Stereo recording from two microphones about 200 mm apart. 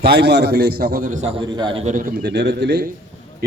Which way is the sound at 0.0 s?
55° right (ahead or behind).